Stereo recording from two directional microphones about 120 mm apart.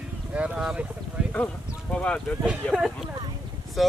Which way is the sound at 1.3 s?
10° left (ahead or behind).